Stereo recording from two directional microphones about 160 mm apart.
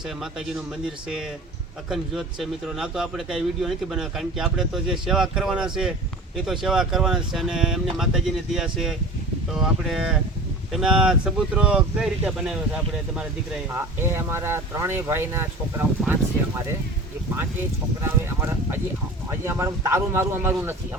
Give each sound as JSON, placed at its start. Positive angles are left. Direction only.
{"t": 0.2, "sound": "speech", "side_deg": -5}
{"t": 18.0, "sound": "speech", "side_deg": -15}